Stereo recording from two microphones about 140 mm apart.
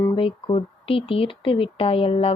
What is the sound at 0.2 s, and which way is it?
Speech, 40° left (ahead or behind).